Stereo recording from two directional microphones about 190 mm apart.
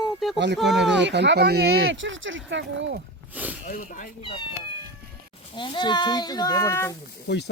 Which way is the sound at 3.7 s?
40° left (ahead or behind).